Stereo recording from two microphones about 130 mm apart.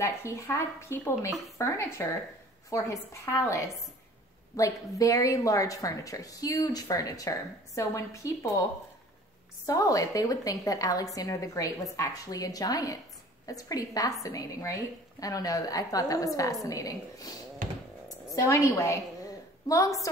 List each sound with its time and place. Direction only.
0.0 s a woman's voice: 20° left (ahead or behind)
9.7 s a woman's voice: 25° left (ahead or behind)